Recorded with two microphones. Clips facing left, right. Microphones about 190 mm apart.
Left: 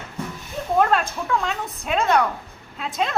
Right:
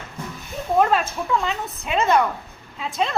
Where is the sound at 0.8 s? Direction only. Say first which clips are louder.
Right 1 dB; centre (ahead or behind).